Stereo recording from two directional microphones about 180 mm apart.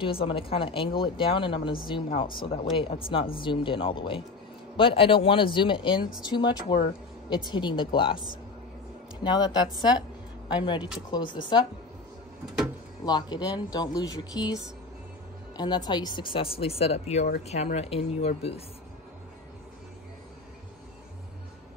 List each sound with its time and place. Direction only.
0.0 s speech: 30° left (ahead or behind)
9.2 s speech: 25° left (ahead or behind)
13.0 s speech: 20° left (ahead or behind)
15.5 s speech: 25° left (ahead or behind)